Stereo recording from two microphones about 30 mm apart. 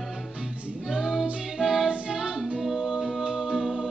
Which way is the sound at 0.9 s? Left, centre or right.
Centre.